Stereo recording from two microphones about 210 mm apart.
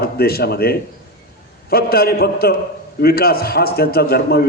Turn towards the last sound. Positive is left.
turn(degrees=50)  # may be behind; listen again after turning